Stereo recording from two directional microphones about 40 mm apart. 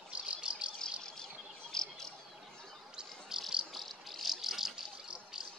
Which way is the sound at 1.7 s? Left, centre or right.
Centre.